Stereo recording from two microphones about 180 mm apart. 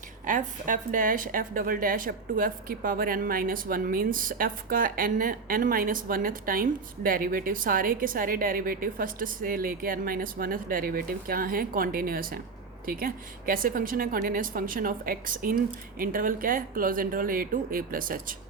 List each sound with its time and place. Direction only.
0.3 s a woman's voice: 45° right (ahead or behind)